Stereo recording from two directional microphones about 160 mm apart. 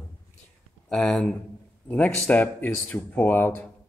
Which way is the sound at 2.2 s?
10° left (ahead or behind).